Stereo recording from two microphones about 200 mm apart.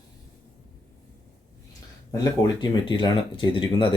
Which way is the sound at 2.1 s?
20° left (ahead or behind).